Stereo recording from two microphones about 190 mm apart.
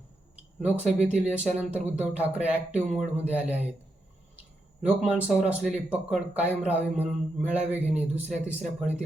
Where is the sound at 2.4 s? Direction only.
35° right (ahead or behind).